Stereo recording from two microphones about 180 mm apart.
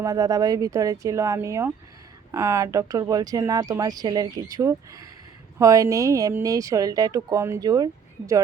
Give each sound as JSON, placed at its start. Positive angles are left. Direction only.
{"t": 0.0, "sound": "speech", "side_deg": -20}